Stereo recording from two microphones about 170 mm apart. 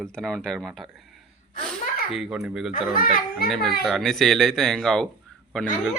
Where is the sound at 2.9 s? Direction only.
55° left (ahead or behind).